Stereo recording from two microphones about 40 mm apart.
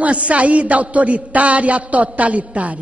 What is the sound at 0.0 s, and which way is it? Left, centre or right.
A man's voice, right.